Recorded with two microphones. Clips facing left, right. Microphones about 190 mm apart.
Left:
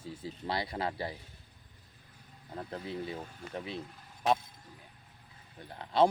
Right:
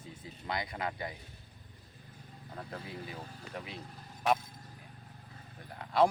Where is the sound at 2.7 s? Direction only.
30° left (ahead or behind).